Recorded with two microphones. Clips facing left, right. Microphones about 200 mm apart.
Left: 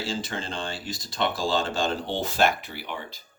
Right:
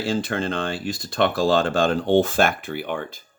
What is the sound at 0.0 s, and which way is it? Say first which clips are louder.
Speech: right 7 dB; 55° right (ahead or behind).